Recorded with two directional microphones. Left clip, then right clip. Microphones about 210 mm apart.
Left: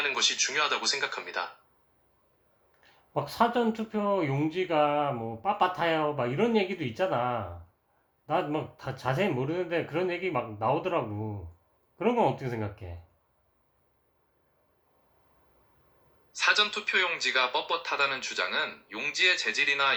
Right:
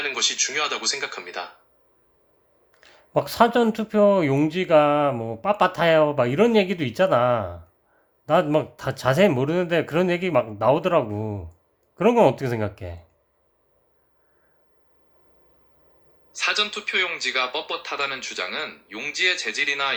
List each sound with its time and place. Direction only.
0.0 s speech: centre (ahead or behind)
2.8 s speech: 55° right (ahead or behind)
16.3 s speech: centre (ahead or behind)